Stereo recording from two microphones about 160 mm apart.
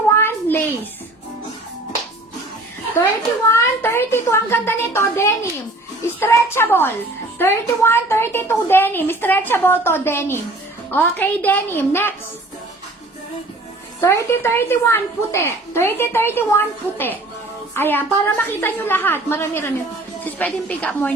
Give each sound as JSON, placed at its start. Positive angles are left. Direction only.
{"t": 0.1, "sound": "a sound", "side_deg": 15}
{"t": 3.6, "sound": "a woman's voice", "side_deg": 15}
{"t": 14.0, "sound": "a woman's voice", "side_deg": 15}